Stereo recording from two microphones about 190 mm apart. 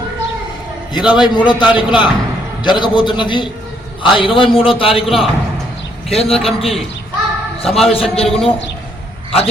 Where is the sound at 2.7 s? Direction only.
25° left (ahead or behind).